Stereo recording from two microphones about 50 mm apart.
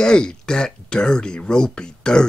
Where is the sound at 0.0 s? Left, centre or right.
Centre.